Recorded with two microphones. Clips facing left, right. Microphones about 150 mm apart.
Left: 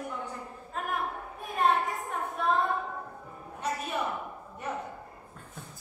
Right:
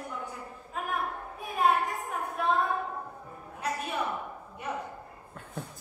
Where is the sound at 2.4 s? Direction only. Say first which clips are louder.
Even; 5° right (ahead or behind).